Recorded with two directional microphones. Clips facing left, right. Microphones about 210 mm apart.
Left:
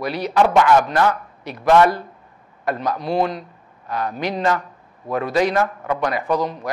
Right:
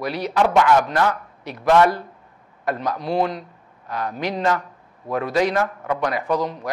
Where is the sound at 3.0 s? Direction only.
10° left (ahead or behind).